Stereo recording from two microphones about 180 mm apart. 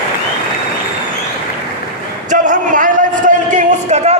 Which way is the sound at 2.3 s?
45° right (ahead or behind).